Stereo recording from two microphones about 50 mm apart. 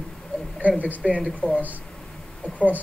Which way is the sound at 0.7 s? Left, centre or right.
Right.